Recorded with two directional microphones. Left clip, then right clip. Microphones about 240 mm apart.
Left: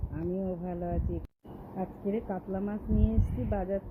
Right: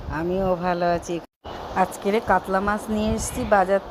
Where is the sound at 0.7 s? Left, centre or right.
Right.